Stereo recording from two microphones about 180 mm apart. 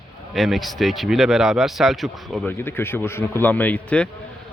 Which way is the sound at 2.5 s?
10° left (ahead or behind).